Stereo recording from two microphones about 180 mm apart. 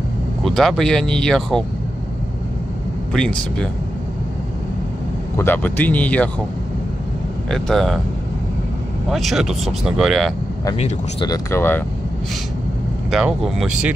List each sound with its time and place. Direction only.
0.4 s speech: centre (ahead or behind)
3.1 s speech: 5° left (ahead or behind)
5.4 s speech: 10° left (ahead or behind)
7.5 s speech: centre (ahead or behind)
9.1 s speech: centre (ahead or behind)
10.8 s speech: 30° left (ahead or behind)
11.5 s speech: 10° left (ahead or behind)
13.1 s speech: centre (ahead or behind)